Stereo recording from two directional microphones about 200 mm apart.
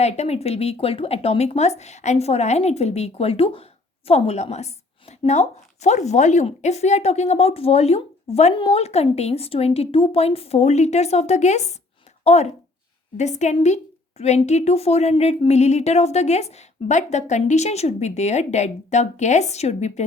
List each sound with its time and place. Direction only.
0.0 s speech: 35° left (ahead or behind)